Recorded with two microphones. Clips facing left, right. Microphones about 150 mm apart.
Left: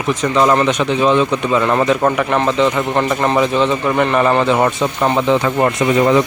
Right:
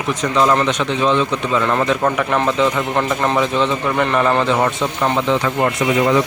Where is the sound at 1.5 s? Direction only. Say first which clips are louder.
Left 2 dB; 20° left (ahead or behind).